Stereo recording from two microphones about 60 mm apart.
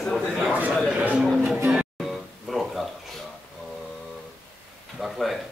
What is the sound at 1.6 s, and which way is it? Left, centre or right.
Music, centre.